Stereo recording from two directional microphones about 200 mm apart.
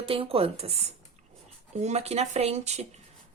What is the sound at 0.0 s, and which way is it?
Speech, 25° right (ahead or behind).